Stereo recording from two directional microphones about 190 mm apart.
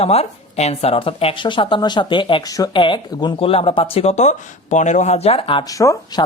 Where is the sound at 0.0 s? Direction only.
35° left (ahead or behind).